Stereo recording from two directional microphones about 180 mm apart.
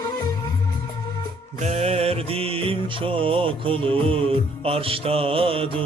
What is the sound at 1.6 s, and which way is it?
Music, 40° right (ahead or behind).